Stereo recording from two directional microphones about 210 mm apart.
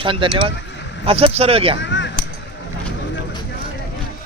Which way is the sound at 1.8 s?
60° left (ahead or behind).